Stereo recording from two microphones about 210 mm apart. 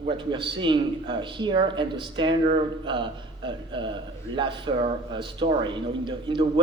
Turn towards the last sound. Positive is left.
turn(degrees=-25)  # may be behind; listen again after turning